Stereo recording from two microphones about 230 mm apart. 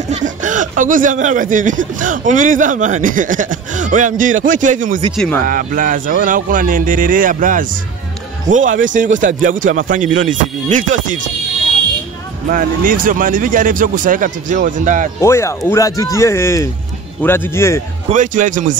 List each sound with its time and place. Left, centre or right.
0.1 s speech: right
5.1 s speech: centre
5.5 s speech: right
12.4 s speech: right
15.1 s speech: centre
18.1 s speech: right